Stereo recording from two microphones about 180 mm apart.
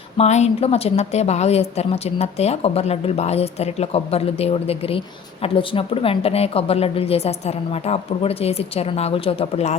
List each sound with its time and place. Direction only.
0.2 s a woman's voice: 40° left (ahead or behind)